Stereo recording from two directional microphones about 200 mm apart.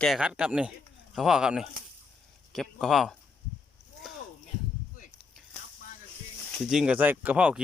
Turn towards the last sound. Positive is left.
turn(degrees=-5)  # may be behind; listen again after turning